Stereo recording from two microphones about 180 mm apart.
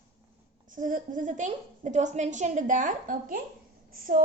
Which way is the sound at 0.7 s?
45° right (ahead or behind).